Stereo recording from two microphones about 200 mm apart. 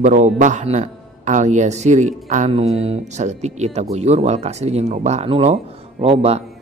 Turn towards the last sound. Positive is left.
turn(degrees=-30)  # may be behind; listen again after turning